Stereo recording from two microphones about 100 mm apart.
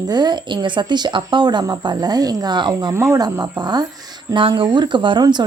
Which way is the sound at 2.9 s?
30° right (ahead or behind).